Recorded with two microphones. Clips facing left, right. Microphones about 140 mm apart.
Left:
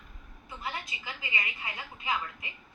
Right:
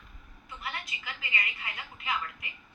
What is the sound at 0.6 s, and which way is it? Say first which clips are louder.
A woman's voice: left 2 dB; 25° left (ahead or behind).